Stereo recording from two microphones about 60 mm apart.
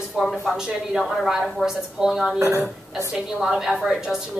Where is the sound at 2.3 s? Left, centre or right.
Right.